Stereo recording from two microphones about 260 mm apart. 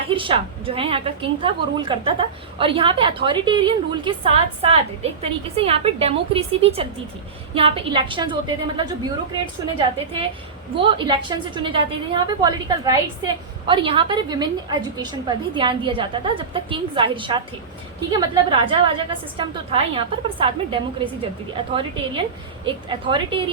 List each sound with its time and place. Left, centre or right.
0.1 s a woman's voice: centre